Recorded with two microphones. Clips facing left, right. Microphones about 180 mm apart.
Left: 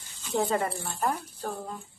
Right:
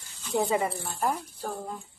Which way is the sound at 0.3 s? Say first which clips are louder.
Right 1 dB; 10° right (ahead or behind).